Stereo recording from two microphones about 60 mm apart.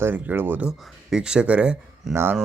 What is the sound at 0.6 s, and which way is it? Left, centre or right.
Speech, centre.